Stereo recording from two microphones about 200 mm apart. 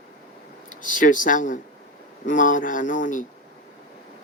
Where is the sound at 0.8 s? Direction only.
40° left (ahead or behind).